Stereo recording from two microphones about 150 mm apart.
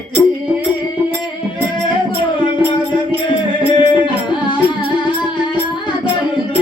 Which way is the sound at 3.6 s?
35° left (ahead or behind).